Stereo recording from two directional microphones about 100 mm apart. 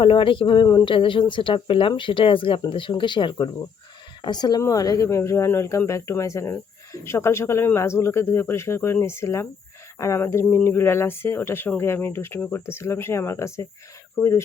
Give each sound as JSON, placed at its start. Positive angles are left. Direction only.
{"t": 0.0, "sound": "speech", "side_deg": 60}